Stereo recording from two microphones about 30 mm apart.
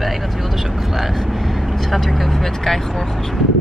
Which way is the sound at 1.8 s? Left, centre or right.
Centre.